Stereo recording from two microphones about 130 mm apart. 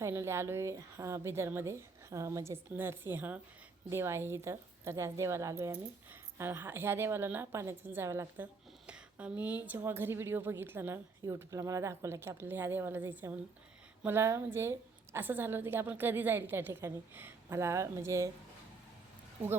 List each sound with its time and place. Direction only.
0.0 s a woman's voice: 20° right (ahead or behind)
8.9 s a woman's voice: 10° right (ahead or behind)